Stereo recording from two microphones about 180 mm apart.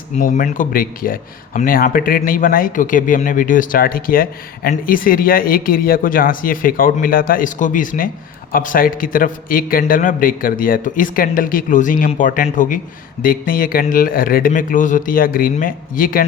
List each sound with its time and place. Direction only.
0.2 s speech: 45° left (ahead or behind)